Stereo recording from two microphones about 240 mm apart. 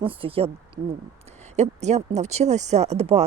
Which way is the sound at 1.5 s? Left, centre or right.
Right.